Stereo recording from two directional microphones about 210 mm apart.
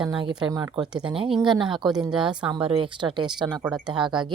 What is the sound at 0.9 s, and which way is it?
Speech, 5° right (ahead or behind).